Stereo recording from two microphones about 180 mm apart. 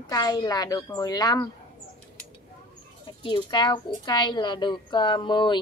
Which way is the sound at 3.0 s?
25° left (ahead or behind).